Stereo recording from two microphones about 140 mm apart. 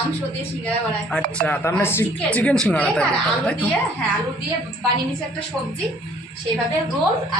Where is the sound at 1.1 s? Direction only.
10° left (ahead or behind).